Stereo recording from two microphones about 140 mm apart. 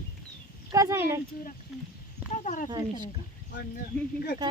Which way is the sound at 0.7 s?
25° right (ahead or behind).